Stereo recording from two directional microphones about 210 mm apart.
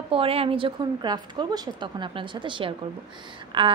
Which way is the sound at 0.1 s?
25° right (ahead or behind).